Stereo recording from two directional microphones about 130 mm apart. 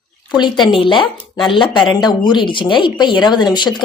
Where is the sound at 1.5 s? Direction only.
40° left (ahead or behind).